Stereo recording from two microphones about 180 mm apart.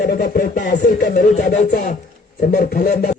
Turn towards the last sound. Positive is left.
turn(degrees=60)  # may be behind; listen again after turning